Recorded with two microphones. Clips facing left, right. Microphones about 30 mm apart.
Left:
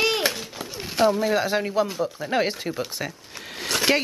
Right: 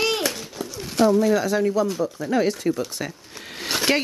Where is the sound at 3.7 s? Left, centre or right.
Centre.